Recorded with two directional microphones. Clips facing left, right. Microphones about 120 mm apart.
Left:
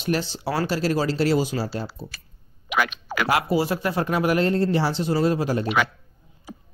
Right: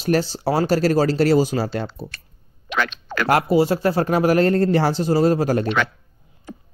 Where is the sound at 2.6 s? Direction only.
10° left (ahead or behind).